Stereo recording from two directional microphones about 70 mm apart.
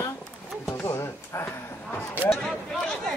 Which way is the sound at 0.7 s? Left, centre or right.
Left.